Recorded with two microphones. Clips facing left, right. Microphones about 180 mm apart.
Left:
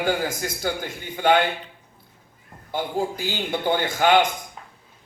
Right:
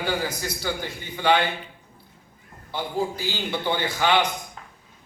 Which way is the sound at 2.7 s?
45° left (ahead or behind).